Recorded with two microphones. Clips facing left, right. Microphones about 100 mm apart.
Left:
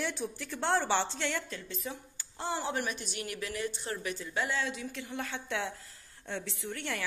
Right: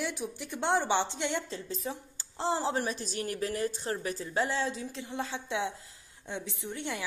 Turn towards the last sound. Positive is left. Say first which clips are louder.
# right 1 dB
turn(degrees=-15)  # may be behind; listen again after turning